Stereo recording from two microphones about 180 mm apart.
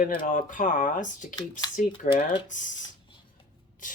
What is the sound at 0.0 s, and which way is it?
Speech, 50° left (ahead or behind).